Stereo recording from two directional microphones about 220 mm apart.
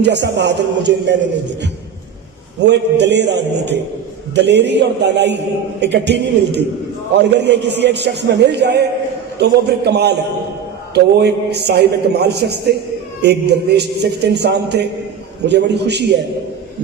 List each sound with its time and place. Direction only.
0.0 s a man's voice: 50° right (ahead or behind)
2.6 s a man's voice: 50° right (ahead or behind)